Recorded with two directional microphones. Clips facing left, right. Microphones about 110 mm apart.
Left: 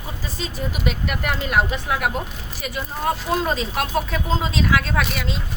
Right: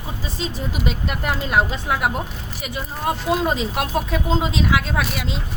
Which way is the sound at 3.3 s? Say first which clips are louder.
Right 2 dB; 15° right (ahead or behind).